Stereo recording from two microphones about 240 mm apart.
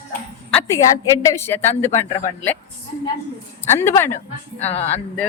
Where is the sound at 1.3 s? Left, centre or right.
Centre.